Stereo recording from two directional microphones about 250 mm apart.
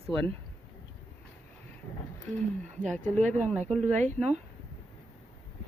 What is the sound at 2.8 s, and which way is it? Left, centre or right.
Speech, right.